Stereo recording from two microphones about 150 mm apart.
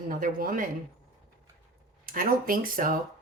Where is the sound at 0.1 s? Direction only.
70° right (ahead or behind).